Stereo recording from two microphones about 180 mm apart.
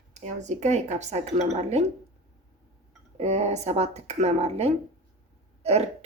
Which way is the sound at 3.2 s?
35° right (ahead or behind).